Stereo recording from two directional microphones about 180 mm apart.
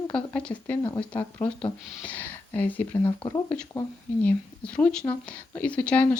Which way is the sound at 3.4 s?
10° left (ahead or behind).